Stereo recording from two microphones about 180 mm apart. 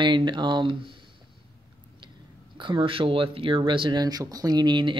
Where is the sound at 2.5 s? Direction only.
25° right (ahead or behind).